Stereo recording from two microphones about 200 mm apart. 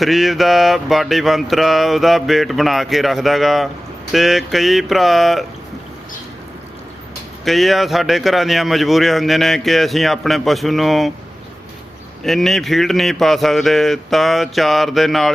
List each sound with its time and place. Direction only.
0.0 s speech: centre (ahead or behind)
7.4 s speech: centre (ahead or behind)
12.2 s speech: centre (ahead or behind)